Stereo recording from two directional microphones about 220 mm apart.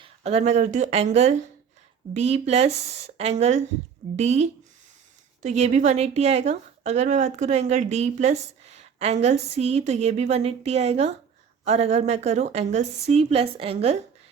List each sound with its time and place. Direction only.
0.0 s a woman's voice: 30° right (ahead or behind)